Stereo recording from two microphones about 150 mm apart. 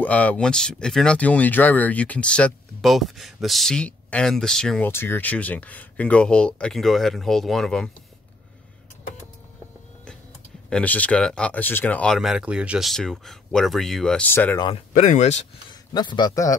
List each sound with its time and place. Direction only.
0.0 s speech: 10° left (ahead or behind)
4.8 s speech: 15° left (ahead or behind)
10.7 s speech: 10° left (ahead or behind)
14.9 s speech: 60° left (ahead or behind)
15.7 s a man's voice: 30° left (ahead or behind)